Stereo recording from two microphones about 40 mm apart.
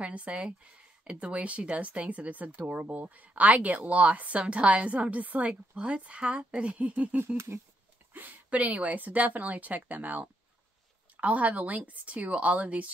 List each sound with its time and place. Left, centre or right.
0.0 s speech: right
7.3 s speech: right
8.1 s a sound: right
8.5 s speech: right